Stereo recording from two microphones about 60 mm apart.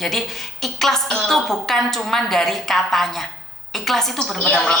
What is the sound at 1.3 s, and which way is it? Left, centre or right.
A woman's voice, centre.